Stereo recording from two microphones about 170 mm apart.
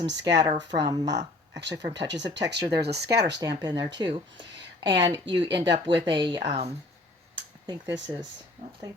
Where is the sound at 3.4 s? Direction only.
25° right (ahead or behind).